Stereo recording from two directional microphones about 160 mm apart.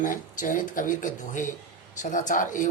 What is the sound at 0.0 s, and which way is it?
Speech, 55° left (ahead or behind).